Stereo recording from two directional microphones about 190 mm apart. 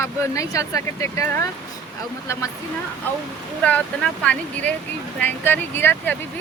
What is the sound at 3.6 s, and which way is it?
Speech, 5° left (ahead or behind).